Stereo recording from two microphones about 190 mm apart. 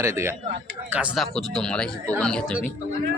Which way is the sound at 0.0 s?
15° right (ahead or behind).